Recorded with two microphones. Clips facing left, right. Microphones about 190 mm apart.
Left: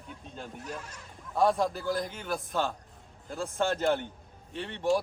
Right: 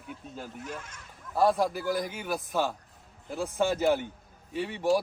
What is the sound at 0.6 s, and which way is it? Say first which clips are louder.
Speech: even; 35° left (ahead or behind).